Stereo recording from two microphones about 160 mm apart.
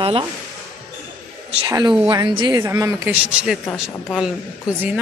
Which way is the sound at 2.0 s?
30° right (ahead or behind).